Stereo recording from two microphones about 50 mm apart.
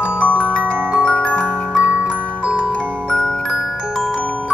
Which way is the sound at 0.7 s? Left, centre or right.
Right.